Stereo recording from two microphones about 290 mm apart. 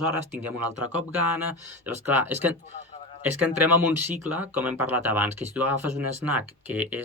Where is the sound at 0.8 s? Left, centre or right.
Right.